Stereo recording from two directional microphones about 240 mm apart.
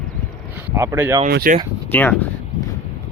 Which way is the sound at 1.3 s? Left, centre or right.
Right.